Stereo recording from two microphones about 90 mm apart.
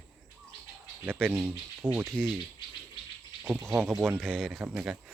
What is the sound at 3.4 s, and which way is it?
Speech, 30° right (ahead or behind).